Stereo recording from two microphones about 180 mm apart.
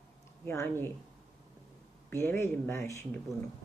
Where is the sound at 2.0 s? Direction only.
15° left (ahead or behind).